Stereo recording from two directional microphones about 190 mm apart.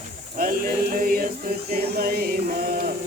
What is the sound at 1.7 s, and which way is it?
Music, 55° right (ahead or behind).